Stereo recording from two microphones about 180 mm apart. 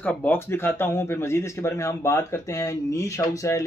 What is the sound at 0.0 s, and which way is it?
Speech, 10° left (ahead or behind).